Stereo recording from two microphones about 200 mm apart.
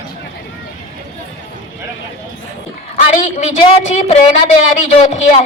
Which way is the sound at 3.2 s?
35° left (ahead or behind).